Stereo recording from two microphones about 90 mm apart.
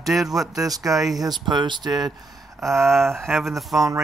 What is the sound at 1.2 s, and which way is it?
Speech, 55° right (ahead or behind).